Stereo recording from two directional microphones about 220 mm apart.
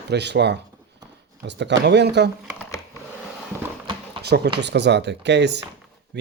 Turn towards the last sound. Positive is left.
turn(degrees=-50)  # may be behind; listen again after turning